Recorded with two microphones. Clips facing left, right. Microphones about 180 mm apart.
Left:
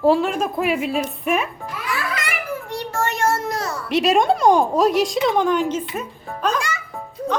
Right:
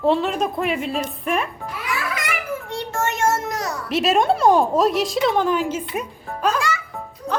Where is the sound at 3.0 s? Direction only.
20° right (ahead or behind).